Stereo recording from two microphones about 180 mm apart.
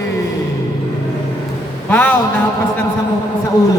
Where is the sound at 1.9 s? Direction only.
10° left (ahead or behind).